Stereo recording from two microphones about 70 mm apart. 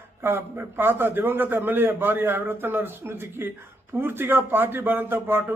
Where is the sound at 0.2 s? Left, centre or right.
Right.